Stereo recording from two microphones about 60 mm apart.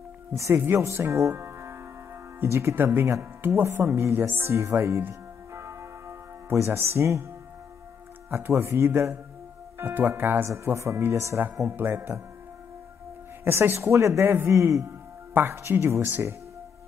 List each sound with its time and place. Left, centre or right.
0.3 s speech: right
1.3 s music: right
2.4 s speech: right
4.6 s a man's voice: right
5.5 s music: right
8.3 s speech: right
10.5 s speech: right
11.7 s speech: right
13.4 s speech: right
13.9 s a man's voice: right
15.3 s a woman's voice: right